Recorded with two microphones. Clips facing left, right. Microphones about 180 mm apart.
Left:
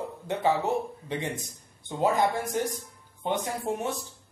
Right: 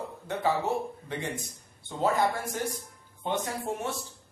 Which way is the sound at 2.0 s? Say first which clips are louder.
Left 2 dB; 20° left (ahead or behind).